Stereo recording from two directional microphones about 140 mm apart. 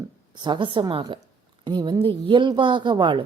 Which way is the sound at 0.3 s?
35° right (ahead or behind).